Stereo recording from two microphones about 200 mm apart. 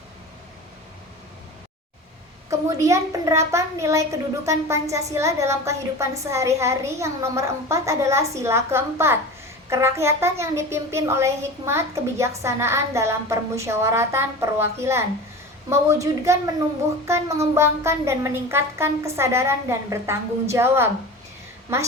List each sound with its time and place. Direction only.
2.5 s a woman's voice: 15° right (ahead or behind)